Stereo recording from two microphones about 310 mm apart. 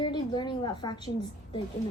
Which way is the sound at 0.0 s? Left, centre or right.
Centre.